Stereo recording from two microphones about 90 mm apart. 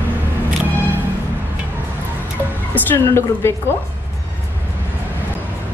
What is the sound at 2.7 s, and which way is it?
A woman's voice, 25° left (ahead or behind).